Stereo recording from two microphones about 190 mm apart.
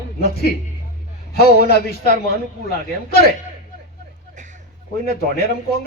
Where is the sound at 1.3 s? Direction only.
55° left (ahead or behind).